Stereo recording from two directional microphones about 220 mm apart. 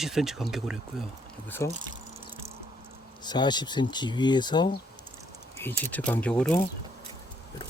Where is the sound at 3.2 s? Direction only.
20° left (ahead or behind).